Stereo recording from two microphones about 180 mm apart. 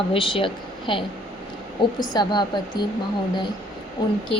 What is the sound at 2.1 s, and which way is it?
Speech, 25° left (ahead or behind).